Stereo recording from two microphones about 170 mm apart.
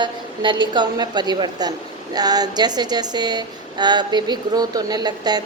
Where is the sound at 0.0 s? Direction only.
25° right (ahead or behind).